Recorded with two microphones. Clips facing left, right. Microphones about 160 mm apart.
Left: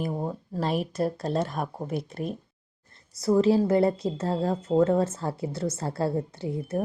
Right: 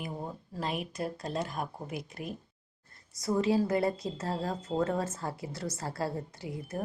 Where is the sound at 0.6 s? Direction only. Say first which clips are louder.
Left 8 dB; 35° left (ahead or behind).